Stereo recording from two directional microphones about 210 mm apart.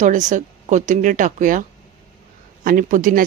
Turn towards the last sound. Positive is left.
turn(degrees=-40)  # may be behind; listen again after turning